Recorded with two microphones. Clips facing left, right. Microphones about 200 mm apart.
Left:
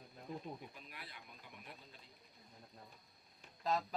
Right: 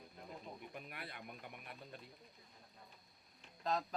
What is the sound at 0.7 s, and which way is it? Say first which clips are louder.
Speech: right 6 dB; 60° right (ahead or behind).